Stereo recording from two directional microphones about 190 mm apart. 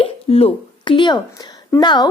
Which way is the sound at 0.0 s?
30° left (ahead or behind).